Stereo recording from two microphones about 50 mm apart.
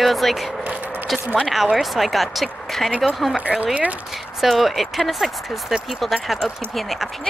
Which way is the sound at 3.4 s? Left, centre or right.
Right.